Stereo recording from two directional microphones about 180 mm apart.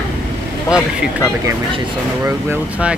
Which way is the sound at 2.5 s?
5° right (ahead or behind).